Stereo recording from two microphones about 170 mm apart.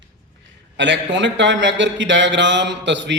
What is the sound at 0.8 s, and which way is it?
Speech, 90° right.